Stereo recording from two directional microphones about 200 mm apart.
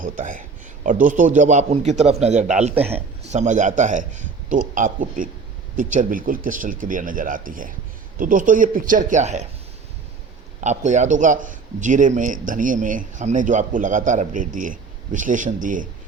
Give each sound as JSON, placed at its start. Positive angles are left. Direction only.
{"t": 0.0, "sound": "a man's voice", "side_deg": -40}
{"t": 10.6, "sound": "a man's voice", "side_deg": -35}